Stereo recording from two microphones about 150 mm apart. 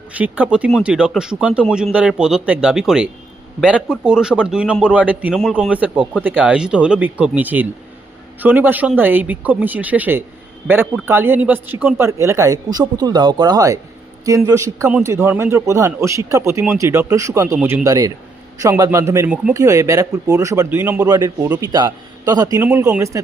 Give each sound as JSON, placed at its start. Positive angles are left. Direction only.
{"t": 0.1, "sound": "a man's voice", "side_deg": -10}